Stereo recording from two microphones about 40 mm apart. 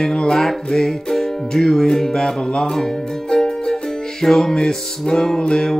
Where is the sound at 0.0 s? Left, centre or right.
Centre.